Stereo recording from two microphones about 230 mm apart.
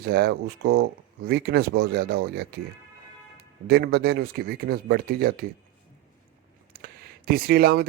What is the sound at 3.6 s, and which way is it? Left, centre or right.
Speech, right.